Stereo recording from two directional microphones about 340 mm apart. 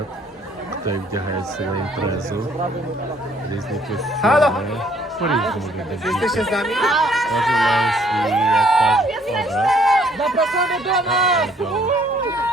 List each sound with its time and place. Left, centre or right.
4.2 s speech: centre